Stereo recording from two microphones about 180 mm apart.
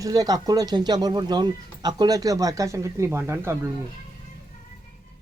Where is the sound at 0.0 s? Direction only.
20° right (ahead or behind).